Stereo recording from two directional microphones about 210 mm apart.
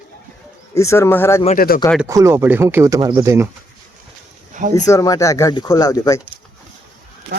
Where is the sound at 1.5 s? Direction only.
45° left (ahead or behind).